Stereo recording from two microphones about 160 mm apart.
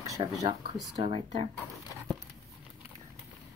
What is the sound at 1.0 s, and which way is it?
Speech, 35° right (ahead or behind).